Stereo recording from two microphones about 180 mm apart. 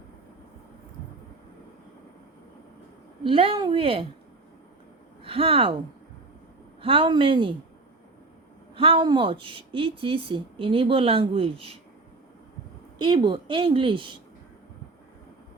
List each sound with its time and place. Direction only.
3.2 s speech: 30° right (ahead or behind)
5.2 s speech: 30° right (ahead or behind)
6.8 s speech: 30° right (ahead or behind)
8.7 s speech: 30° right (ahead or behind)
13.0 s speech: 25° right (ahead or behind)